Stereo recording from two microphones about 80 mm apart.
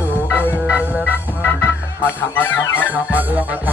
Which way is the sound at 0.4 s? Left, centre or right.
Centre.